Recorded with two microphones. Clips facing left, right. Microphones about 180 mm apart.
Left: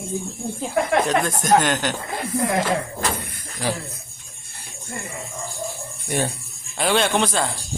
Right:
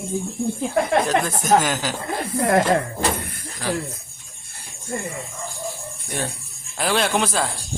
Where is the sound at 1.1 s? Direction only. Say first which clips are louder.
Even; 5° right (ahead or behind).